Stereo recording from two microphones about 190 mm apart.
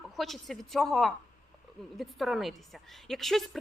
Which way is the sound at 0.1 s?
Centre (ahead or behind).